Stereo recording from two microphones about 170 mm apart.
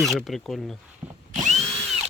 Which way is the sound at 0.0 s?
Centre (ahead or behind).